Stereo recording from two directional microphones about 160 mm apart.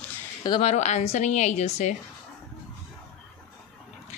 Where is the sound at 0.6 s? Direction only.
45° left (ahead or behind).